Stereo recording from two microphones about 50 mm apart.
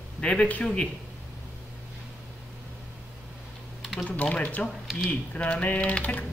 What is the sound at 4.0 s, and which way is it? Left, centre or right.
Speech, left.